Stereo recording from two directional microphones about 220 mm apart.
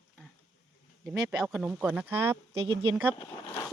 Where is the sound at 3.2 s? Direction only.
20° left (ahead or behind).